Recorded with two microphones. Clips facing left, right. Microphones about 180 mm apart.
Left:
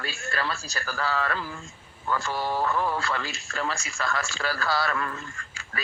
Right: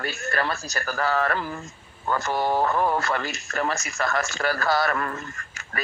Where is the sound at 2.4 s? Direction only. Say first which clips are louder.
Right 5 dB; 55° right (ahead or behind).